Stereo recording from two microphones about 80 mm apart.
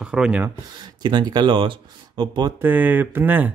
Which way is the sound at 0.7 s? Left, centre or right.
Right.